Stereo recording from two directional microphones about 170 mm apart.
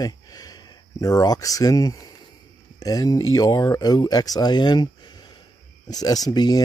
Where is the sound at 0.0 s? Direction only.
20° left (ahead or behind).